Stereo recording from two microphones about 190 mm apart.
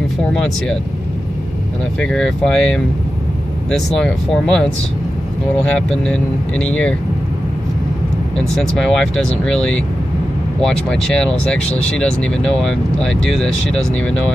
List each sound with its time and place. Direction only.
0.3 s speech: 5° left (ahead or behind)
2.0 s speech: 5° left (ahead or behind)
5.8 s speech: 5° left (ahead or behind)
8.4 s speech: centre (ahead or behind)
11.6 s speech: 35° left (ahead or behind)
12.0 s speech: 5° left (ahead or behind)